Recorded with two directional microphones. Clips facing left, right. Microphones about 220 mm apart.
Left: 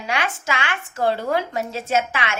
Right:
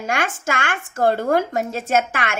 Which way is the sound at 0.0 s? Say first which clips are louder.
Right 2 dB; 50° right (ahead or behind).